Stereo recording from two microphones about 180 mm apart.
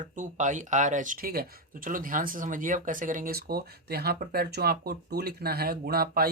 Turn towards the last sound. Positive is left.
turn(degrees=-55)  # may be behind; listen again after turning